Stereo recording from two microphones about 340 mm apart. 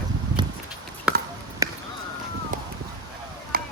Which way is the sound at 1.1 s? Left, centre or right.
Centre.